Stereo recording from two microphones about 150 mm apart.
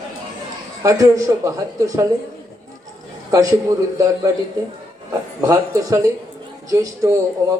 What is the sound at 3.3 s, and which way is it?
A man's voice, 25° right (ahead or behind).